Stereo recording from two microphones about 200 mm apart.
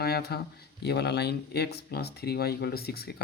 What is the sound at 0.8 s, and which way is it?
Speech, 55° left (ahead or behind).